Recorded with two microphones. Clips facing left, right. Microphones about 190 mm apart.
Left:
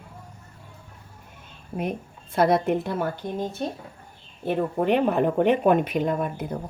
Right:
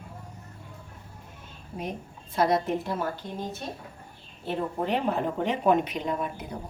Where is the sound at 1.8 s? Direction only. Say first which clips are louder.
Left 6 dB; 55° left (ahead or behind).